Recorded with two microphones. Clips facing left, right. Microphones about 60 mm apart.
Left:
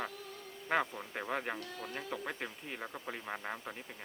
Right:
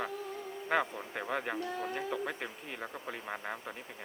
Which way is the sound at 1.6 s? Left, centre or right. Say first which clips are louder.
Right 7 dB; right.